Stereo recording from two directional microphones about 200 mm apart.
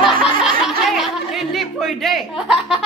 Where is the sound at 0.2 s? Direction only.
Centre (ahead or behind).